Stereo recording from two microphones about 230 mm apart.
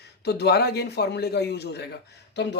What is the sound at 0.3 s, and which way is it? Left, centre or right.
Speech, left.